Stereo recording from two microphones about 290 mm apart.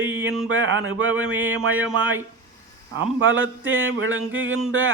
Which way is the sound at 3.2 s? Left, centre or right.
Right.